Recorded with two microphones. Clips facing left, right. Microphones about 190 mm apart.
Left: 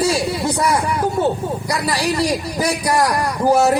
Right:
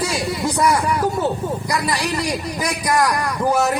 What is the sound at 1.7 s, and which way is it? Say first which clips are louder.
A man's voice: left 3 dB; 30° left (ahead or behind).